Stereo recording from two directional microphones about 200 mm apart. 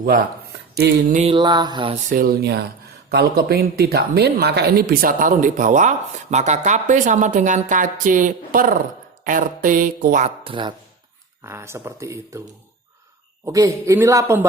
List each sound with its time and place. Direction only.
1.1 s mantra: 30° right (ahead or behind)
2.0 s a woman's voice: 45° right (ahead or behind); by 10.8 s 25° right (ahead or behind)
11.4 s speech: 15° right (ahead or behind)
13.4 s speech: 15° right (ahead or behind)